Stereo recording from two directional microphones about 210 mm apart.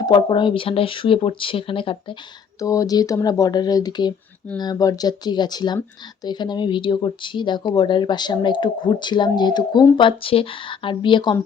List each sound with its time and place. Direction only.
0.0 s speech: 20° left (ahead or behind)